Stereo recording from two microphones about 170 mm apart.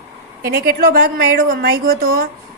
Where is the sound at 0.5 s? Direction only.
65° right (ahead or behind).